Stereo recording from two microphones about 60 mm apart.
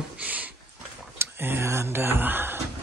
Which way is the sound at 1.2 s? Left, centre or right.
Right.